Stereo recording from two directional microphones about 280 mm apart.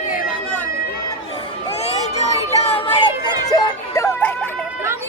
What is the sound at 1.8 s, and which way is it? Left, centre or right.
Music, left.